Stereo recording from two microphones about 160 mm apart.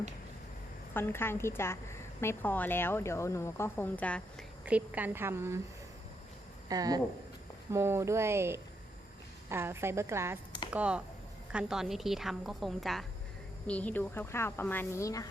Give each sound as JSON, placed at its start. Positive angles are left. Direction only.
{"t": 0.9, "sound": "a woman's voice", "side_deg": 15}
{"t": 4.6, "sound": "a woman's voice", "side_deg": -10}
{"t": 6.7, "sound": "a woman's voice", "side_deg": -25}